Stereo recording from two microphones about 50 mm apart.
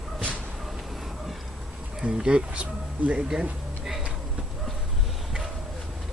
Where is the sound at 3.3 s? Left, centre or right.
Centre.